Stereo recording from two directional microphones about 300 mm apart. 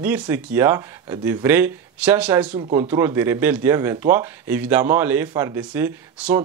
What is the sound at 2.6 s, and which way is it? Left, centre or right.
Speech, centre.